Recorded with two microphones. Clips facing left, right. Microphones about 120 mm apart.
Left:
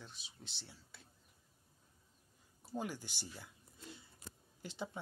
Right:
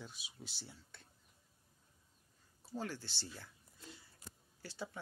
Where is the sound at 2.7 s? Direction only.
15° left (ahead or behind).